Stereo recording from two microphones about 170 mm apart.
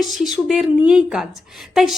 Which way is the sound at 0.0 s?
Centre (ahead or behind).